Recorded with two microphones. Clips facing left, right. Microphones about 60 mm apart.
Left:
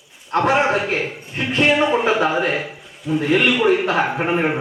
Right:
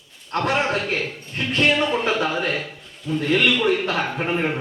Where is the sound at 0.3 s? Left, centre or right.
Centre.